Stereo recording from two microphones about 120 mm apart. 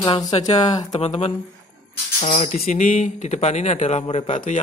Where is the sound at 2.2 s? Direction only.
85° left.